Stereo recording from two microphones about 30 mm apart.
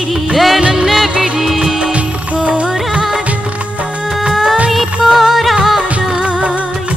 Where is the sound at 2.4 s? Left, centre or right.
Right.